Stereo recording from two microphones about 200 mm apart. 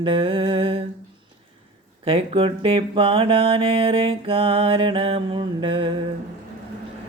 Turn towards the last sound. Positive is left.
turn(degrees=-25)  # may be behind; listen again after turning